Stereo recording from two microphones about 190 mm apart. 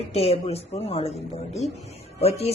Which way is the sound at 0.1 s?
35° left (ahead or behind).